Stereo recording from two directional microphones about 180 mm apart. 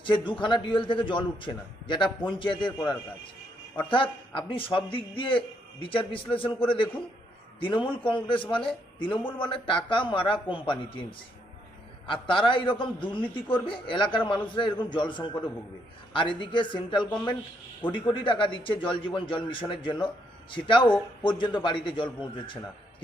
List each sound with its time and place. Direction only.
0.0 s a man's voice: 25° left (ahead or behind)
3.8 s a man's voice: 30° left (ahead or behind)
12.0 s a man's voice: 30° left (ahead or behind)